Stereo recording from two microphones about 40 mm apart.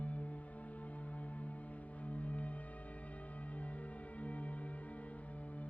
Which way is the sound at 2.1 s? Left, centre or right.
Left.